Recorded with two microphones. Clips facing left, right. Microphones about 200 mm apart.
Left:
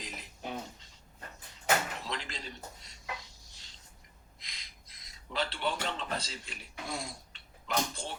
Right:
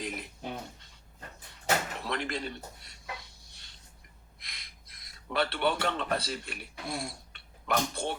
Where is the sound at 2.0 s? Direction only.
60° right (ahead or behind).